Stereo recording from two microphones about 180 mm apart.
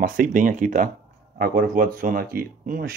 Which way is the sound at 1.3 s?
55° right (ahead or behind).